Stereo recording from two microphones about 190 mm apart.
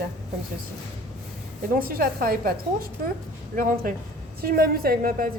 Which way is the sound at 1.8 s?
50° right (ahead or behind).